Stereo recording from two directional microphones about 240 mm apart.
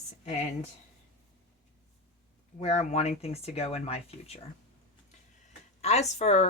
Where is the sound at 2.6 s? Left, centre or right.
Left.